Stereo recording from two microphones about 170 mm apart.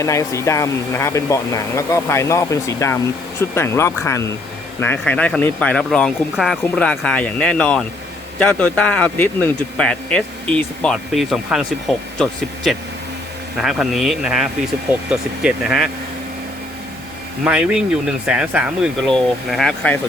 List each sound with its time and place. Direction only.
0.0 s speech: 20° left (ahead or behind); by 11.6 s centre (ahead or behind)
13.6 s speech: centre (ahead or behind)
17.4 s speech: 5° right (ahead or behind)